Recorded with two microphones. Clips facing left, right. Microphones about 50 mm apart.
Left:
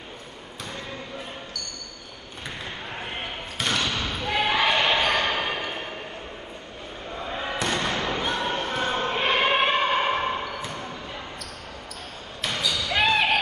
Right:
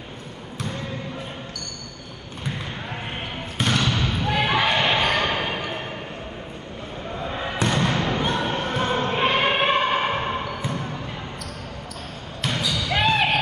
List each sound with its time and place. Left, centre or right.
3.6 s basketball bounce: centre
7.6 s thump: centre
9.2 s music: centre
9.6 s music: centre
12.5 s basketball bounce: centre